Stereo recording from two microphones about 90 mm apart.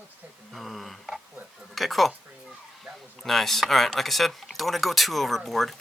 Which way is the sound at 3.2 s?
5° left (ahead or behind).